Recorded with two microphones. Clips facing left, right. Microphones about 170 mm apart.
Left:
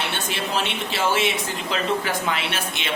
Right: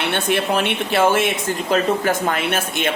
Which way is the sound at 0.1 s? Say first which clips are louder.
Right 7 dB; 55° right (ahead or behind).